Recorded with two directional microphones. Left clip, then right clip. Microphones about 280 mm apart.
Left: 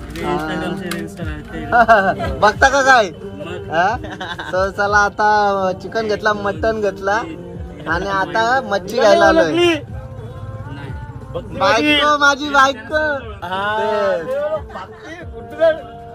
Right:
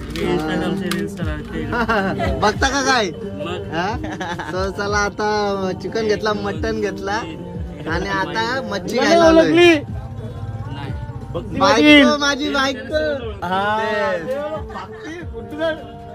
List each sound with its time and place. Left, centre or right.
0.1 s speech: centre
11.5 s speech: centre
13.4 s speech: right
13.7 s speech: centre